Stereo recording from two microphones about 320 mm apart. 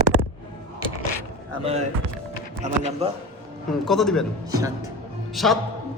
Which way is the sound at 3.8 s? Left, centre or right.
Centre.